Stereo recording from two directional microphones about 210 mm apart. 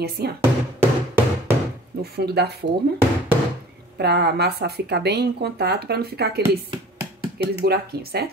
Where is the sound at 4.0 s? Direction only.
50° right (ahead or behind).